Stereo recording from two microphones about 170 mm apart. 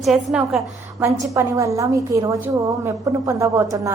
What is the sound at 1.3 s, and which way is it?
A woman's voice, 20° right (ahead or behind).